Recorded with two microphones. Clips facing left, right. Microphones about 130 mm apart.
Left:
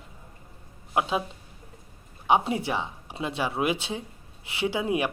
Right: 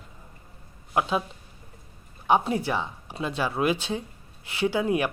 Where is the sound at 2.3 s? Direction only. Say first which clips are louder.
Right 1 dB; 20° left (ahead or behind).